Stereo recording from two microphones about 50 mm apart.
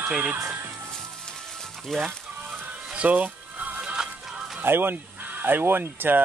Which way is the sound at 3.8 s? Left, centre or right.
Centre.